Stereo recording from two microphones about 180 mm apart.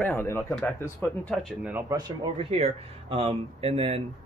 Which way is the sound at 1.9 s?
15° right (ahead or behind).